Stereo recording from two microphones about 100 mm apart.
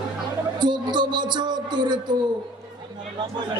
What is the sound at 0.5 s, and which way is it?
A man's voice, 50° right (ahead or behind).